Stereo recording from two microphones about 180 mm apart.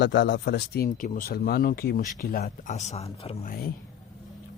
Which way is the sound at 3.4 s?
55° left (ahead or behind).